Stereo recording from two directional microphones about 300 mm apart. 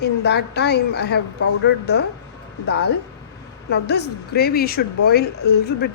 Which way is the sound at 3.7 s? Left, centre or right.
Left.